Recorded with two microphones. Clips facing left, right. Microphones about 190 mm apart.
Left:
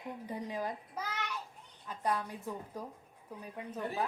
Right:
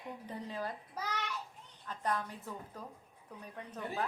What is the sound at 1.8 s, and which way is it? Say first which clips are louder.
Speech: left 2 dB; 10° left (ahead or behind).